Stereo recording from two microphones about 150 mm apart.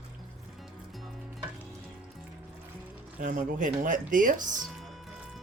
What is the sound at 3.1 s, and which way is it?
Speech, 60° right (ahead or behind).